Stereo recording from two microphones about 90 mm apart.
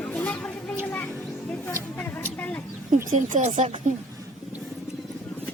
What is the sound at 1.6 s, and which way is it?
Music, 20° left (ahead or behind).